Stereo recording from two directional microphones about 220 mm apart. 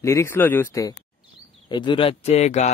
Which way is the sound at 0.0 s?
10° left (ahead or behind).